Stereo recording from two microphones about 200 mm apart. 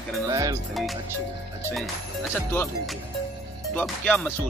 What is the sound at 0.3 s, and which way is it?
Speech, 15° right (ahead or behind).